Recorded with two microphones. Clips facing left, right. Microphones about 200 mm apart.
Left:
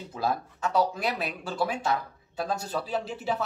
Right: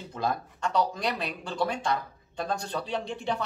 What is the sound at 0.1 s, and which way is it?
Speech, 5° left (ahead or behind).